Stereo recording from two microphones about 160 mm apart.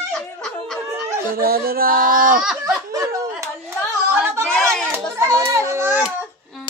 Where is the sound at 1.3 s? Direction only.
70° right (ahead or behind).